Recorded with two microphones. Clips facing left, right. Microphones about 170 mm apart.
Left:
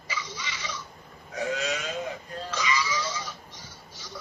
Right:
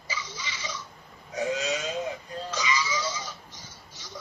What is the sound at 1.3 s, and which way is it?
Burping, 20° right (ahead or behind).